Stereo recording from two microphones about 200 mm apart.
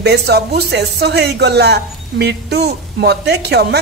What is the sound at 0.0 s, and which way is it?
A woman's voice, 55° right (ahead or behind).